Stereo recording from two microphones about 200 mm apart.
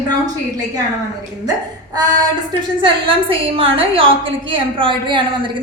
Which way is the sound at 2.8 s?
25° right (ahead or behind).